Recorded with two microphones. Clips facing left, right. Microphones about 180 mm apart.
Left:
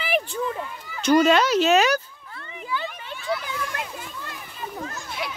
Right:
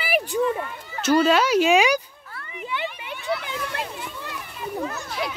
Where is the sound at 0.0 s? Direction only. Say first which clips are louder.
Right 1 dB; 10° right (ahead or behind).